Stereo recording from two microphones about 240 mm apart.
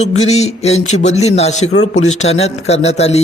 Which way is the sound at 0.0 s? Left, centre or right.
Left.